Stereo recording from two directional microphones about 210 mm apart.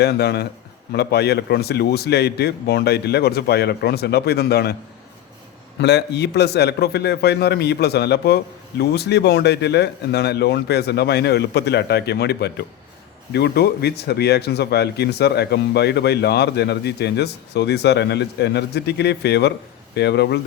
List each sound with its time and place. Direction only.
0.0 s speech: 50° left (ahead or behind)
5.8 s speech: 55° left (ahead or behind)